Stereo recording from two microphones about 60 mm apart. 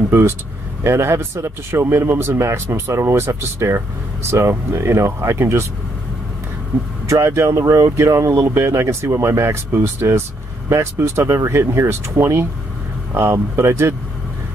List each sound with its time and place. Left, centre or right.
0.8 s speech: right
7.2 s speech: right